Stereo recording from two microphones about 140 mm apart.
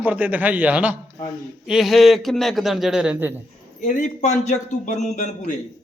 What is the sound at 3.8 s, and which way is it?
A man's voice, 60° left (ahead or behind).